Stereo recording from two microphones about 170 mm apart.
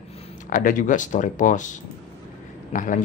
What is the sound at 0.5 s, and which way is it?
Speech, 50° left (ahead or behind).